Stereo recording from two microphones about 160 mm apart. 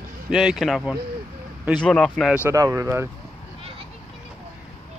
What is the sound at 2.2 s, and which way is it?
Speech, 10° right (ahead or behind).